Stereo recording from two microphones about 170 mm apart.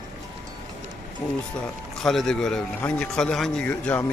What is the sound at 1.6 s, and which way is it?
Speech, centre (ahead or behind).